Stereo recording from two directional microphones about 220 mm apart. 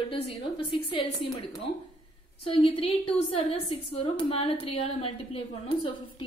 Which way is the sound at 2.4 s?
25° left (ahead or behind).